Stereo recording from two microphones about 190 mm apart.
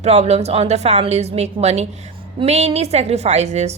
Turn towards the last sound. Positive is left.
turn(degrees=-35)  # may be behind; listen again after turning